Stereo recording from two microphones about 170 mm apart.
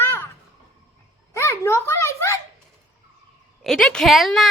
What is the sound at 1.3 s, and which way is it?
A child's voice, 15° left (ahead or behind).